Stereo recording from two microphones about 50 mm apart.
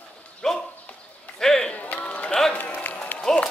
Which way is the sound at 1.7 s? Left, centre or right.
Left.